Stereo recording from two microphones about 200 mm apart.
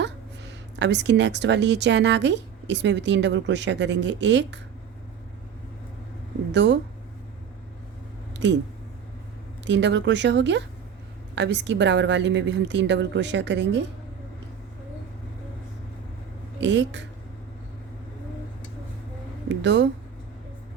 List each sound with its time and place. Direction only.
0.8 s speech: 60° right (ahead or behind)
6.5 s speech: 60° right (ahead or behind)
8.3 s a sound: 65° right (ahead or behind)
9.6 s speech: 65° right (ahead or behind)
16.6 s speech: 65° right (ahead or behind)
19.5 s speech: 65° right (ahead or behind)